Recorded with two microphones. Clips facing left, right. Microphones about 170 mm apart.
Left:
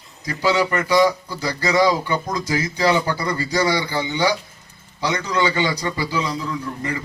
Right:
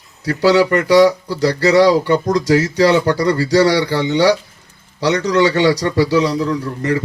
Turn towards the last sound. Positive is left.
turn(degrees=-75)  # may be behind; listen again after turning